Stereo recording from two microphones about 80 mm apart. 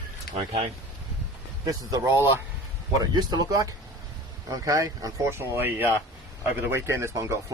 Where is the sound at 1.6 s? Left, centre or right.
Right.